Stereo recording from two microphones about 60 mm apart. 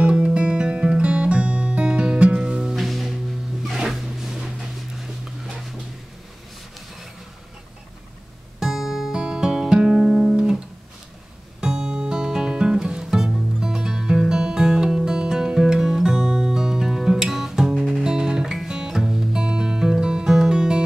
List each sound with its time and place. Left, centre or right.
0.0 s music: centre
2.7 s music: centre
3.6 s a sound: centre
8.5 s music: centre
11.6 s music: centre